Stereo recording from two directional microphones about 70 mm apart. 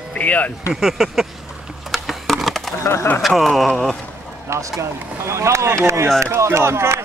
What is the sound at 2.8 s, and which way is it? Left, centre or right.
Speech, left.